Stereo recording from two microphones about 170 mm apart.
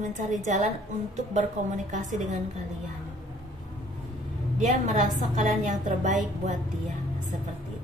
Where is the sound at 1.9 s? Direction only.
45° right (ahead or behind).